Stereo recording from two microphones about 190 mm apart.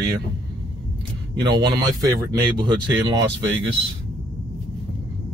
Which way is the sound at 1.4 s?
20° right (ahead or behind).